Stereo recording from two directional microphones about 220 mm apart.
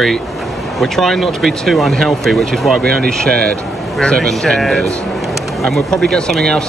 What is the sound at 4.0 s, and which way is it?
Speech, 5° left (ahead or behind).